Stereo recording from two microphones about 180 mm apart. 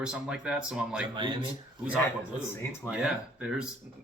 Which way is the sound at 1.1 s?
25° right (ahead or behind).